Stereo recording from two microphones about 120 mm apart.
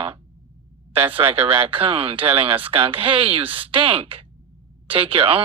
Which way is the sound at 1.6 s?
50° right (ahead or behind).